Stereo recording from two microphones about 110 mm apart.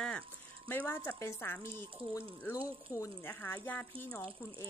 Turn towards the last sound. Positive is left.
turn(degrees=25)  # may be behind; listen again after turning